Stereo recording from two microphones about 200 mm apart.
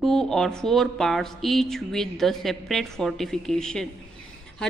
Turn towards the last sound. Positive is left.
turn(degrees=5)  # may be behind; listen again after turning